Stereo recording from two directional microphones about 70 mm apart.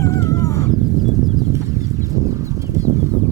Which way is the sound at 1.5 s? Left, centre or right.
Right.